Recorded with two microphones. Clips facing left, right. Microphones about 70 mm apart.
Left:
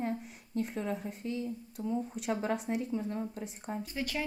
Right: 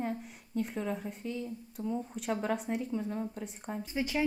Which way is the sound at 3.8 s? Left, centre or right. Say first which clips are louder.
Right 5 dB; centre.